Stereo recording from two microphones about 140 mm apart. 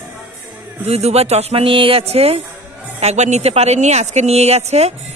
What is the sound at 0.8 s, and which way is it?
Speech, 50° right (ahead or behind).